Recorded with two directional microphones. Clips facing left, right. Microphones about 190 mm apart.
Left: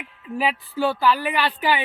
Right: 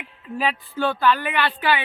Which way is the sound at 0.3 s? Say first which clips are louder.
Left 1 dB; 10° left (ahead or behind).